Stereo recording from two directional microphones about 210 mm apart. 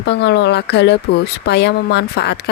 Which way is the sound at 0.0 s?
55° left (ahead or behind).